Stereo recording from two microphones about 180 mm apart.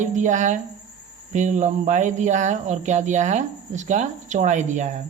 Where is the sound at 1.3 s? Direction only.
40° right (ahead or behind).